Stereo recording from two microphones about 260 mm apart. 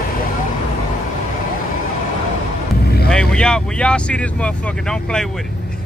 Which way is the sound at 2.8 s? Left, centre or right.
Left.